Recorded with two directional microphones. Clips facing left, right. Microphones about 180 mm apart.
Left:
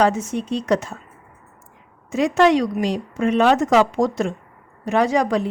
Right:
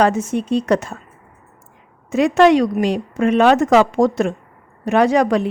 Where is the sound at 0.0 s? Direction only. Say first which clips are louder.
Right 2 dB; 55° right (ahead or behind).